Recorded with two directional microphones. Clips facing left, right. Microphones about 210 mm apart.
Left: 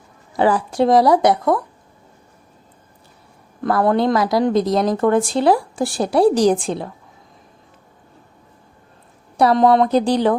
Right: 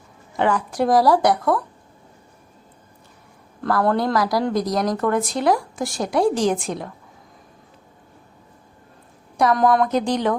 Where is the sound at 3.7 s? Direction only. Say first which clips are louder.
Left 3 dB; 25° left (ahead or behind).